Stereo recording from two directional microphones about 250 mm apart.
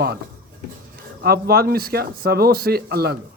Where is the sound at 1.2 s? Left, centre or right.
Right.